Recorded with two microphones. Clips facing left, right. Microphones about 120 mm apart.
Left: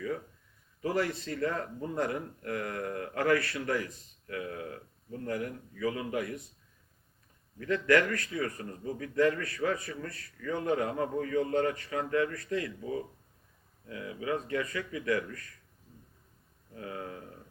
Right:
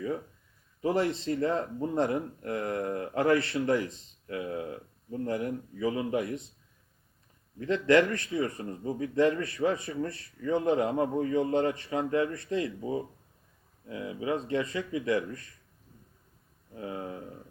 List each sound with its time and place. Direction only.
0.8 s speech: 25° right (ahead or behind)
7.6 s speech: 25° right (ahead or behind)
16.7 s speech: 25° right (ahead or behind)